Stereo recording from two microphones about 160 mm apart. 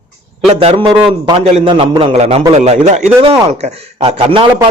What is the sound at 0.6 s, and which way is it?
A man's voice, 35° right (ahead or behind).